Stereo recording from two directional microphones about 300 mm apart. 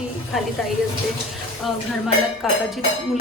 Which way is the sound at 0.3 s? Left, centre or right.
Centre.